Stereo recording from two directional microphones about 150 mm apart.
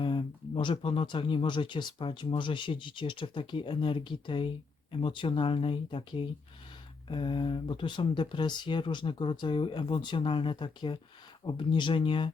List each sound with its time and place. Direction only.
0.0 s speech: 35° left (ahead or behind)